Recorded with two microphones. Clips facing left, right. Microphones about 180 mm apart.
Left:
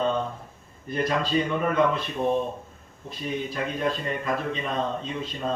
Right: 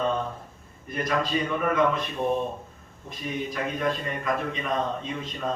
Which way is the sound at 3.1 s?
30° left (ahead or behind).